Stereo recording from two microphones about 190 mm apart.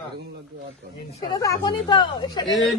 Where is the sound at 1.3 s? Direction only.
20° left (ahead or behind).